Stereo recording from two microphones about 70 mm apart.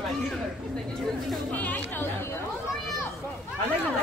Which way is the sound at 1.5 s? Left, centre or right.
Left.